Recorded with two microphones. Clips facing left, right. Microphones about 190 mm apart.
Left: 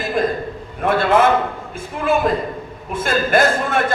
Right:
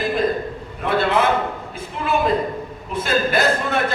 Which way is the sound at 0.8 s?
50° left (ahead or behind).